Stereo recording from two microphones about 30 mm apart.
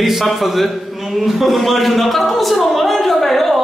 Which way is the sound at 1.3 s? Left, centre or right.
Centre.